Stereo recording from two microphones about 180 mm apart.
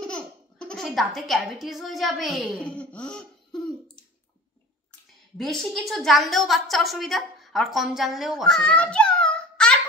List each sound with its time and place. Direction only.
0.0 s baby laughter: 5° left (ahead or behind)
5.4 s a woman's voice: centre (ahead or behind)